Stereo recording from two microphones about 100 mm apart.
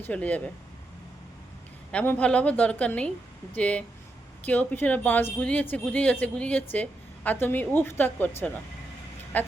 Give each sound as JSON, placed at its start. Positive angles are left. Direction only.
{"t": 0.0, "sound": "a woman's voice", "side_deg": 15}
{"t": 1.9, "sound": "a woman's voice", "side_deg": 15}